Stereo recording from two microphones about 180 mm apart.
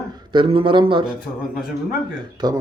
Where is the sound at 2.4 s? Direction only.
25° right (ahead or behind).